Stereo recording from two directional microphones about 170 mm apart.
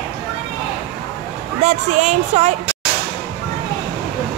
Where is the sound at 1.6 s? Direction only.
45° right (ahead or behind).